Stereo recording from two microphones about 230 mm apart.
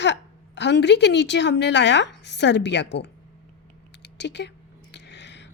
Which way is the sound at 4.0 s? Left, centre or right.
Left.